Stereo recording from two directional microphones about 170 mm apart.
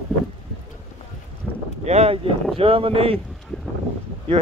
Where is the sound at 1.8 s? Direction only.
40° right (ahead or behind).